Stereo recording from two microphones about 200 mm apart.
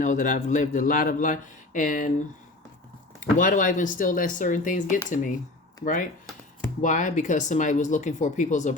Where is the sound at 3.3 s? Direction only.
40° left (ahead or behind).